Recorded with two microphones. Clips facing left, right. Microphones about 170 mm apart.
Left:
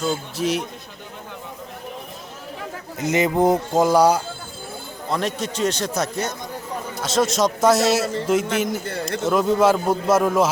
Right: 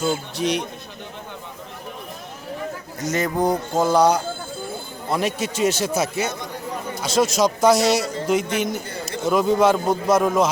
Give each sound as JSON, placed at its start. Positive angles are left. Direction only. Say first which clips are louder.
{"t": 0.0, "sound": "a man's voice", "louder": "right 1 dB", "side_deg": 0}
{"t": 3.1, "sound": "music", "louder": "left 3 dB", "side_deg": 20}
{"t": 5.0, "sound": "a man's voice", "louder": "right 1 dB", "side_deg": -5}